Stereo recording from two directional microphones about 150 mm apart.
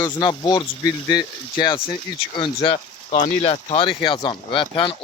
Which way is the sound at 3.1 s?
50° left (ahead or behind).